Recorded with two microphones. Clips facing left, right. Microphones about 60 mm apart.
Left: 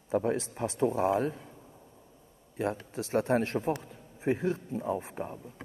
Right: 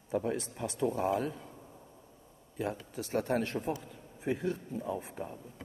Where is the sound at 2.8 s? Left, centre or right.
Left.